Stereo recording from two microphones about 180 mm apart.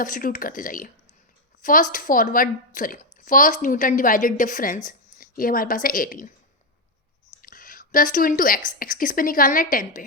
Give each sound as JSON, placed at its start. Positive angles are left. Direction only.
{"t": 0.0, "sound": "a woman's voice", "side_deg": 50}
{"t": 7.4, "sound": "a woman's voice", "side_deg": 50}